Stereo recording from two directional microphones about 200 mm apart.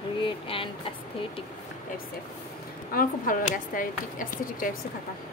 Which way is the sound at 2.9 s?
45° left (ahead or behind).